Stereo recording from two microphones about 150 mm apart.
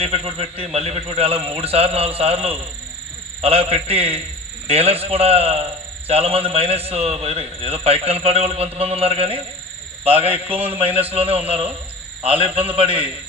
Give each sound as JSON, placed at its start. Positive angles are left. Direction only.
{"t": 0.0, "sound": "a man's voice", "side_deg": -40}
{"t": 10.2, "sound": "a man's voice", "side_deg": -10}
{"t": 11.1, "sound": "a man's voice", "side_deg": -40}
{"t": 12.5, "sound": "a man's voice", "side_deg": -10}
{"t": 12.7, "sound": "a man's voice", "side_deg": -35}